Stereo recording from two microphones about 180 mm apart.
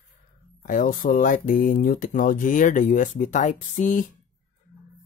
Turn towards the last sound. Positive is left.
turn(degrees=45)  # may be behind; listen again after turning